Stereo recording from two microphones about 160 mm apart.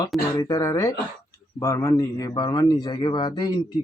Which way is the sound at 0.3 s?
20° left (ahead or behind).